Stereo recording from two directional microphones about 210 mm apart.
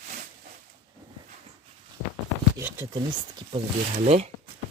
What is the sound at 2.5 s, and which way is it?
Speech, 15° right (ahead or behind).